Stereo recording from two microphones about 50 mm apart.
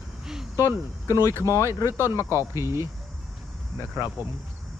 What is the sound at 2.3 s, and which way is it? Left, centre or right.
Speech, right.